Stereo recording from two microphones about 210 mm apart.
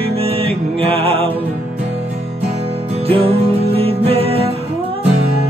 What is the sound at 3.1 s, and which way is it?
Music, 25° right (ahead or behind).